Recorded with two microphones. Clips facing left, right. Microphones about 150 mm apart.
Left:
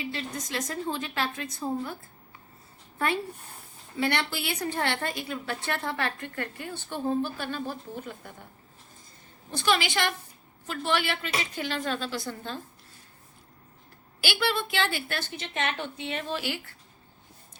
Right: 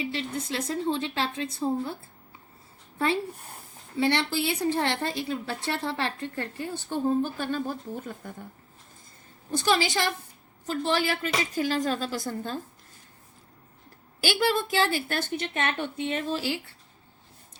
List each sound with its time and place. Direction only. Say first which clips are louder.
0.0 s a woman's voice: right 3 dB; 30° right (ahead or behind)
4.0 s a woman's voice: right 3 dB; 30° right (ahead or behind)
9.6 s a woman's voice: right 1 dB; 35° right (ahead or behind)
14.3 s a woman's voice: right 4 dB; 40° right (ahead or behind)